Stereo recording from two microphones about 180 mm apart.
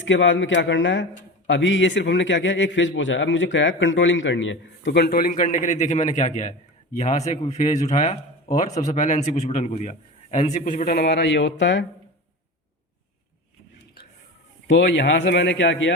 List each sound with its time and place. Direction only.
0.0 s a man's voice: 90° left
14.7 s speech: 75° left (ahead or behind)